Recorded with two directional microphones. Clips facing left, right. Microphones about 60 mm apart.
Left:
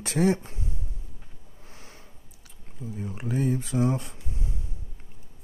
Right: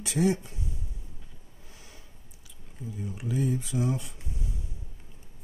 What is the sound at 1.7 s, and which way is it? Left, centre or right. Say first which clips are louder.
Vehicle: left 4 dB; left.